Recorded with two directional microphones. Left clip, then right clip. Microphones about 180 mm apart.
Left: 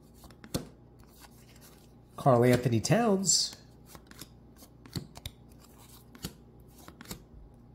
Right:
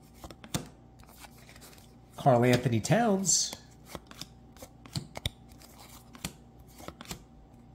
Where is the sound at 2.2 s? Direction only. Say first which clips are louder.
Even; 10° left (ahead or behind).